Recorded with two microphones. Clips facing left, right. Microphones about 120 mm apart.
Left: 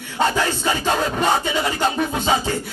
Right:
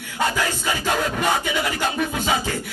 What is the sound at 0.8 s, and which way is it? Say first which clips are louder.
Music: left 2 dB; 25° left (ahead or behind).